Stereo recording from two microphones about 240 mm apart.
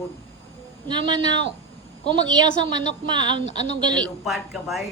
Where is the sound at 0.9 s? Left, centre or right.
Centre.